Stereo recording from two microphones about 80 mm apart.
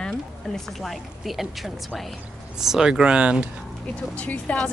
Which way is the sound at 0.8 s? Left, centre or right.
Centre.